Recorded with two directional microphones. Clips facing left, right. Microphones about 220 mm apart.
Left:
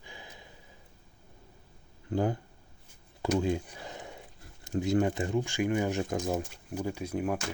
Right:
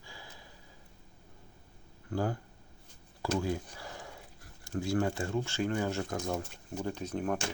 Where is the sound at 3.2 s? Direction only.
20° left (ahead or behind).